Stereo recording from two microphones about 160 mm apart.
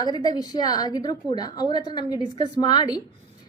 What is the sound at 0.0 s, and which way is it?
A woman's voice, 25° left (ahead or behind).